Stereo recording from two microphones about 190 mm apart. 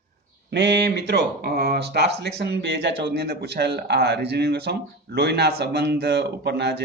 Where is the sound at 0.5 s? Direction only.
65° right (ahead or behind).